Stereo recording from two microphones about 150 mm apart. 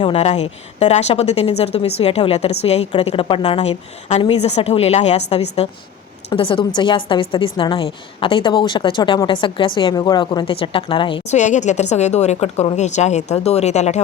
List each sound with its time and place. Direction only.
0.0 s a woman's voice: 40° left (ahead or behind)
11.3 s a woman's voice: 55° left (ahead or behind)